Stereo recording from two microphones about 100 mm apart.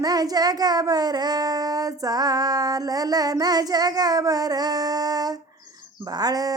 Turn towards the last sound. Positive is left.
turn(degrees=-40)  # may be behind; listen again after turning